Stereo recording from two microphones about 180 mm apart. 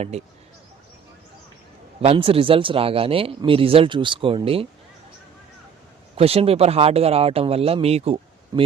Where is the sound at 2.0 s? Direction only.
30° right (ahead or behind).